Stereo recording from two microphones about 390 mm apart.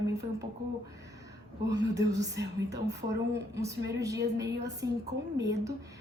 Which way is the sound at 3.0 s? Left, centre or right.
Centre.